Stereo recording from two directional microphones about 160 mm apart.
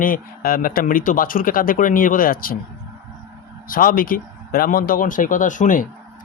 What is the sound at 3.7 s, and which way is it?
A man's voice, 60° left (ahead or behind).